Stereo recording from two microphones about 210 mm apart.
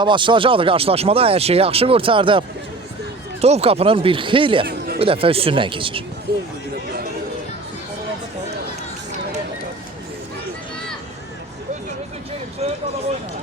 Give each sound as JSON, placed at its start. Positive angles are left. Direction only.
{"t": 0.0, "sound": "speech", "side_deg": -20}
{"t": 3.4, "sound": "speech", "side_deg": -30}
{"t": 6.3, "sound": "speech", "side_deg": -50}